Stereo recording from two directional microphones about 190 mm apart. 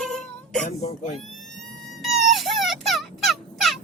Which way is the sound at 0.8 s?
35° left (ahead or behind).